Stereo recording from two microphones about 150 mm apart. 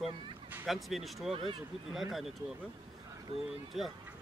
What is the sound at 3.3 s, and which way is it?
Speech, 40° right (ahead or behind).